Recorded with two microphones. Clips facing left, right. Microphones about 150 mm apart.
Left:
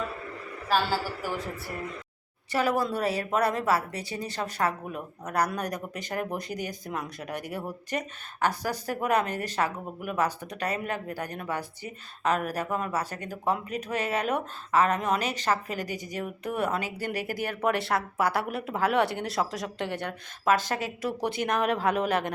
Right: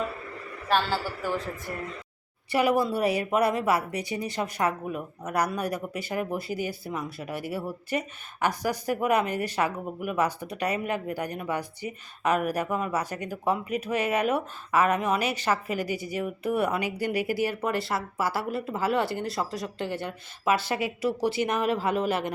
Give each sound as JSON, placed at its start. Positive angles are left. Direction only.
{"t": 0.7, "sound": "speech", "side_deg": 5}
{"t": 2.5, "sound": "speech", "side_deg": -15}
{"t": 17.6, "sound": "speech", "side_deg": 0}
{"t": 19.9, "sound": "a woman's voice", "side_deg": 60}
{"t": 20.8, "sound": "speech", "side_deg": 50}
{"t": 21.4, "sound": "speech", "side_deg": -5}